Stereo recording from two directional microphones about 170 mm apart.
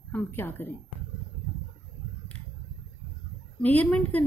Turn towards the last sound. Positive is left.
turn(degrees=10)  # may be behind; listen again after turning